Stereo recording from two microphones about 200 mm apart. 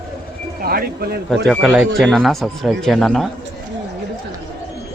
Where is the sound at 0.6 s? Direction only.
50° right (ahead or behind).